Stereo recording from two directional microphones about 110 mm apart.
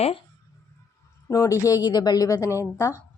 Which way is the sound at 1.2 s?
25° left (ahead or behind).